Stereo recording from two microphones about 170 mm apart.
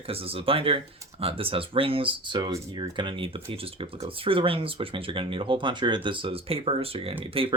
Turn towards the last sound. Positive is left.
turn(degrees=-30)  # may be behind; listen again after turning